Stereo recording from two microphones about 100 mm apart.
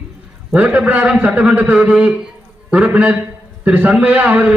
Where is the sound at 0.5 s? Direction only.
15° right (ahead or behind).